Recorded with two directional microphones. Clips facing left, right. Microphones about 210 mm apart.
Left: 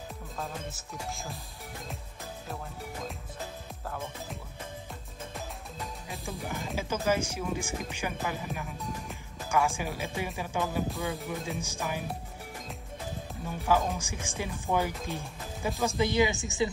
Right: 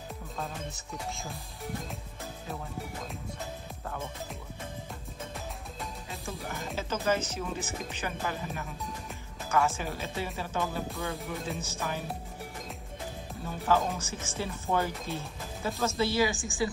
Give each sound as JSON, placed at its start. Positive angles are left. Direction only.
{"t": 0.4, "sound": "speech", "side_deg": 0}
{"t": 3.9, "sound": "speech", "side_deg": 0}
{"t": 6.2, "sound": "speech", "side_deg": 15}
{"t": 13.5, "sound": "speech", "side_deg": 10}